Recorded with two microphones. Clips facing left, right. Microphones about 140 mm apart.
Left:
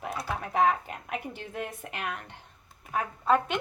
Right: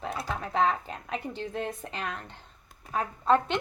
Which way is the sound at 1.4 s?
25° right (ahead or behind).